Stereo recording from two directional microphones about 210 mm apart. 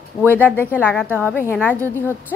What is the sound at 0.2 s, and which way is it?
Speech, 10° right (ahead or behind).